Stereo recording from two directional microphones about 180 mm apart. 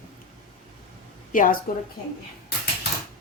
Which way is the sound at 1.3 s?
50° left (ahead or behind).